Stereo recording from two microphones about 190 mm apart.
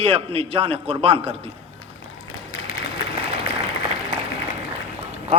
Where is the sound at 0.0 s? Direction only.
30° right (ahead or behind).